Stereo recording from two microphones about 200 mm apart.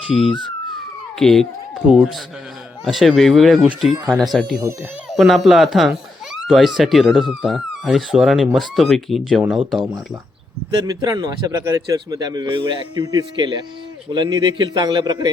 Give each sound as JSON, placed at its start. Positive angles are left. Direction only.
{"t": 0.1, "sound": "a sound", "side_deg": 0}
{"t": 1.9, "sound": "speech", "side_deg": 0}
{"t": 10.8, "sound": "a man's voice", "side_deg": -20}